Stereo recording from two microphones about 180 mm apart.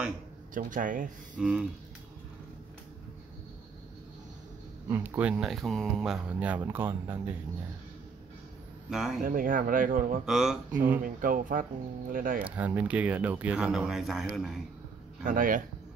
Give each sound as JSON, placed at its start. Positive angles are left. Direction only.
{"t": 0.6, "sound": "speech", "side_deg": -50}
{"t": 1.3, "sound": "speech", "side_deg": -5}
{"t": 4.8, "sound": "speech", "side_deg": -10}
{"t": 8.9, "sound": "speech", "side_deg": 0}
{"t": 9.2, "sound": "speech", "side_deg": -50}
{"t": 10.2, "sound": "speech", "side_deg": -5}
{"t": 11.0, "sound": "speech", "side_deg": -50}
{"t": 12.4, "sound": "speech", "side_deg": -10}
{"t": 15.2, "sound": "speech", "side_deg": -50}